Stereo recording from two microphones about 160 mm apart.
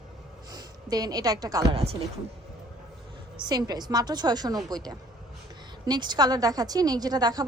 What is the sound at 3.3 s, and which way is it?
A woman's voice, 25° right (ahead or behind).